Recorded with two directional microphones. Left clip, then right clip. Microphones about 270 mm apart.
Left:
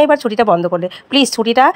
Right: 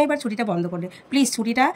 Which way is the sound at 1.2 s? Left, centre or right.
Centre.